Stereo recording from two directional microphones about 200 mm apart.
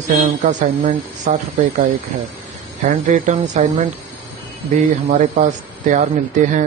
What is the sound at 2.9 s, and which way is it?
Speech, 40° right (ahead or behind).